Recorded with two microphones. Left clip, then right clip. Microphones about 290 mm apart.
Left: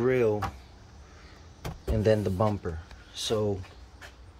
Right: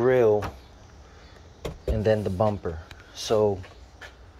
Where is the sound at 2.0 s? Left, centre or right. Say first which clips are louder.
Right 2 dB; centre.